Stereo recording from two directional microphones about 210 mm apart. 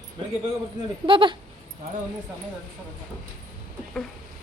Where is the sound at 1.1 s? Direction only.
25° right (ahead or behind).